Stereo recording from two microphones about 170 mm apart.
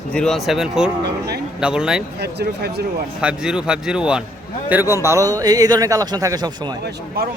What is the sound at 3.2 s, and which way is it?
A man's voice, 5° right (ahead or behind).